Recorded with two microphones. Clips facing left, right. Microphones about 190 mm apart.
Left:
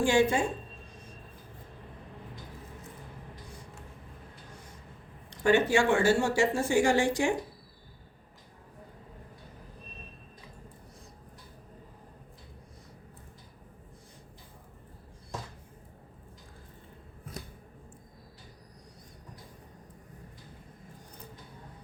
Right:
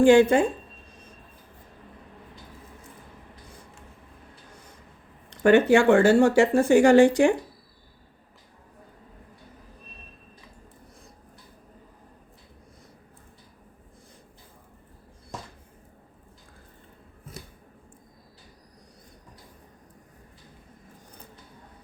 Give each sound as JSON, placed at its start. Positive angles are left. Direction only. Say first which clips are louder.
{"t": 0.0, "sound": "speech", "louder": "right 9 dB", "side_deg": -55}
{"t": 5.4, "sound": "speech", "louder": "right 7 dB", "side_deg": -60}